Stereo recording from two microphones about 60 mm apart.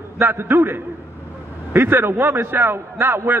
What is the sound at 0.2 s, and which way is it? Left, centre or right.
A man's voice, right.